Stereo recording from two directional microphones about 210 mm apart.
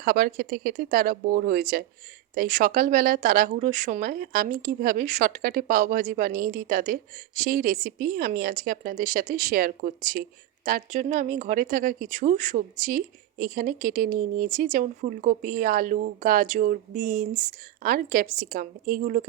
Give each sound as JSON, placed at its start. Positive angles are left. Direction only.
{"t": 0.0, "sound": "speech", "side_deg": -45}